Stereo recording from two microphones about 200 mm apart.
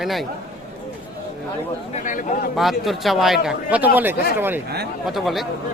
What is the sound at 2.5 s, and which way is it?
A man's voice, centre (ahead or behind).